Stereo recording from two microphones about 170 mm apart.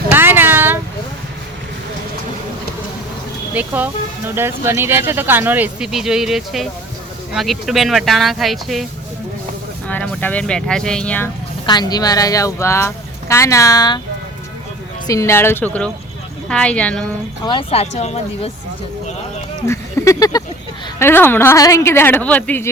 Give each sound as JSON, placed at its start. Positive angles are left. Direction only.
{"t": 0.1, "sound": "a sound", "side_deg": -10}
{"t": 3.5, "sound": "speech", "side_deg": -10}
{"t": 11.6, "sound": "speech", "side_deg": 25}
{"t": 15.0, "sound": "speech", "side_deg": 20}
{"t": 17.4, "sound": "speech", "side_deg": 30}
{"t": 19.6, "sound": "a sound", "side_deg": 15}
{"t": 21.0, "sound": "speech", "side_deg": 10}